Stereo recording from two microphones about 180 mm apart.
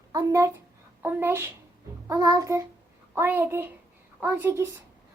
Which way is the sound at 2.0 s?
20° right (ahead or behind).